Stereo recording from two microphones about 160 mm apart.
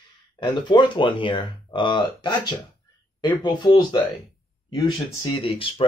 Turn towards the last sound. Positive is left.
turn(degrees=35)  # may be behind; listen again after turning